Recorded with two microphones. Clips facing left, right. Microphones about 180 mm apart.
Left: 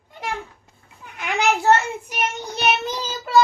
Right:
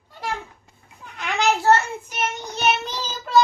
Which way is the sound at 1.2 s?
15° left (ahead or behind).